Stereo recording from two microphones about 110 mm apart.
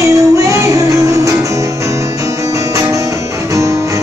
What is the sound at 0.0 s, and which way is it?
Music, 30° right (ahead or behind).